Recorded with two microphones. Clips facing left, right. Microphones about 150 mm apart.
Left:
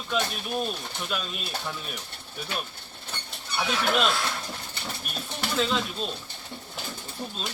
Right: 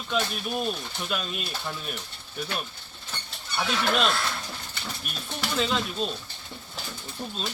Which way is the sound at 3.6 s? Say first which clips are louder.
Even; 5° left (ahead or behind).